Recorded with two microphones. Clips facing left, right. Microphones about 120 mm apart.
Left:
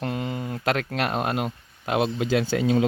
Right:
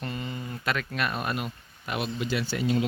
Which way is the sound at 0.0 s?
90° left.